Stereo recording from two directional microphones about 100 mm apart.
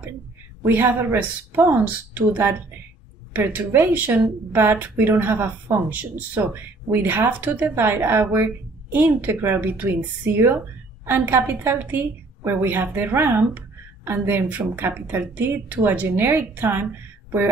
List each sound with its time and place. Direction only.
0.7 s a woman's voice: 20° right (ahead or behind)